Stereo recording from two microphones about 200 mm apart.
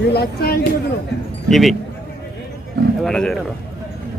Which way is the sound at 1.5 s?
Centre (ahead or behind).